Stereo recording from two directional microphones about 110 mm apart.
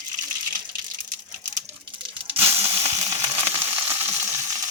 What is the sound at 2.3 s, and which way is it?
Sizzle, 20° right (ahead or behind).